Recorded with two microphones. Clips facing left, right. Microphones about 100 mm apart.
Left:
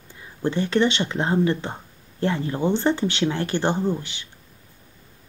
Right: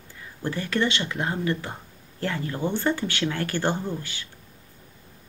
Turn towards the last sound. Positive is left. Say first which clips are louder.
# left 6 dB
turn(degrees=20)  # may be behind; listen again after turning